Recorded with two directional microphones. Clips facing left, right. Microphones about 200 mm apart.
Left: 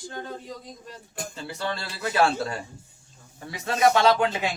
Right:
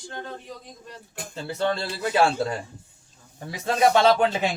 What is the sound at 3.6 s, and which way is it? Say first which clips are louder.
Speech: right 1 dB; 25° right (ahead or behind).